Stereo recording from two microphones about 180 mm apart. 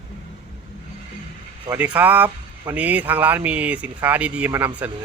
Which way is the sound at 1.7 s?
10° right (ahead or behind).